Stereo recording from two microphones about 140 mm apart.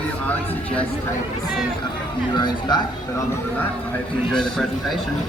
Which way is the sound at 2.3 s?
30° left (ahead or behind).